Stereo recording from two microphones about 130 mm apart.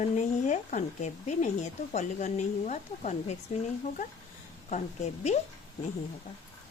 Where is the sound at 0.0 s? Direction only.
65° left (ahead or behind).